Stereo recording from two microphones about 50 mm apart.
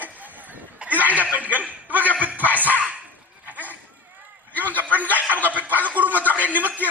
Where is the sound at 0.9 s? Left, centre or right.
Right.